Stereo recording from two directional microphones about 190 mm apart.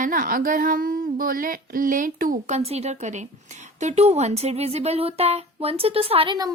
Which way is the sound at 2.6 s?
35° right (ahead or behind).